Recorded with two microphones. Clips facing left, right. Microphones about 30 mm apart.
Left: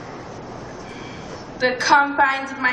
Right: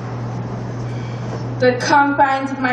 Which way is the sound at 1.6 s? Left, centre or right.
Centre.